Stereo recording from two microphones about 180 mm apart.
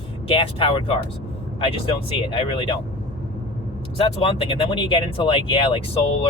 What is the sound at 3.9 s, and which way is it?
Speech, 30° left (ahead or behind).